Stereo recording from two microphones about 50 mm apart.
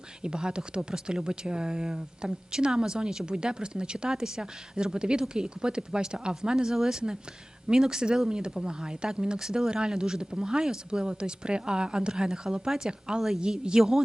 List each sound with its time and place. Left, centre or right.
0.2 s speech: centre